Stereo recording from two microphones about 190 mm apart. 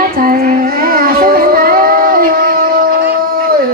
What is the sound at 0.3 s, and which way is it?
Music, 50° right (ahead or behind).